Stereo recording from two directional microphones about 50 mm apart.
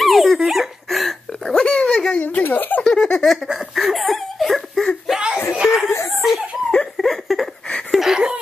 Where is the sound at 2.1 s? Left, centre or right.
Left.